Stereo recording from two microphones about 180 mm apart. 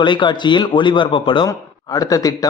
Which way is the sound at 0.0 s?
25° left (ahead or behind).